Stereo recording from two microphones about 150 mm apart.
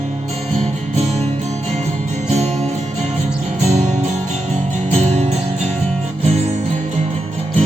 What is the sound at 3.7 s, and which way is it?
Music, 50° right (ahead or behind).